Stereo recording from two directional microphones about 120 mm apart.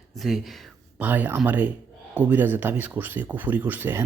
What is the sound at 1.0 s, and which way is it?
Speech, 15° right (ahead or behind).